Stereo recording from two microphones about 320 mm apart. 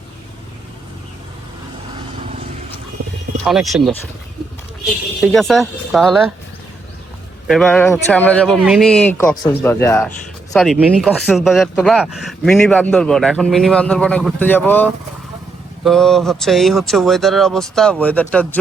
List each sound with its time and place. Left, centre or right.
3.4 s speech: centre
5.2 s speech: centre
7.4 s speech: centre